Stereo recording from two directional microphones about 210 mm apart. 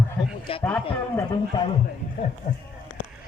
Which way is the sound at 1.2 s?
20° left (ahead or behind).